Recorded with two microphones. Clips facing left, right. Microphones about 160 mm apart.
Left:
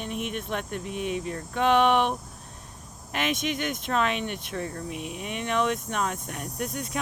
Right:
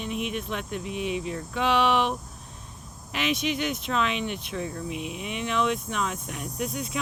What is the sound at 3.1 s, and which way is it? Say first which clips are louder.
Speech: right 1 dB; 50° left (ahead or behind).